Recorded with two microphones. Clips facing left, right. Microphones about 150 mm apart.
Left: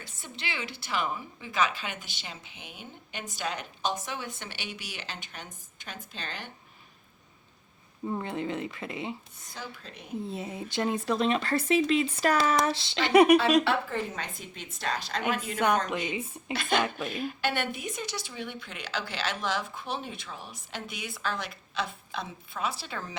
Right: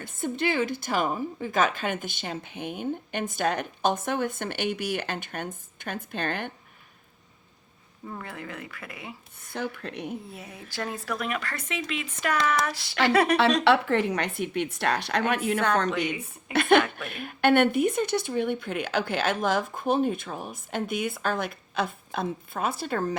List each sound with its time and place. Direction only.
0.0 s a woman's voice: 50° right (ahead or behind)
8.0 s speech: 20° left (ahead or behind)
9.5 s a woman's voice: 60° right (ahead or behind)
10.2 s speech: 25° left (ahead or behind)
13.7 s a woman's voice: 75° right (ahead or behind)
16.2 s a woman's voice: 60° right (ahead or behind)